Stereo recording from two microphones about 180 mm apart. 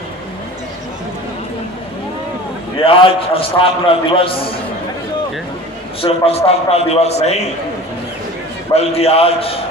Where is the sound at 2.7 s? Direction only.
30° left (ahead or behind).